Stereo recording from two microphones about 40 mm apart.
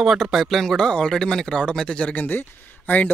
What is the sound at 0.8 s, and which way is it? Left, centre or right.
Speech, centre.